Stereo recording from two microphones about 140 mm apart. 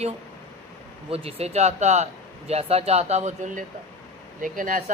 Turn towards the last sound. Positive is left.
turn(degrees=-75)  # may be behind; listen again after turning